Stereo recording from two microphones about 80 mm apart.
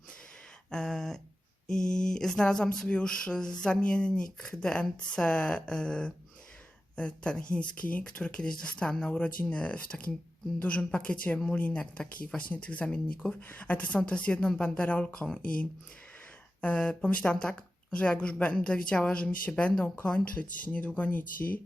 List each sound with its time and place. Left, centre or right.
0.7 s speech: centre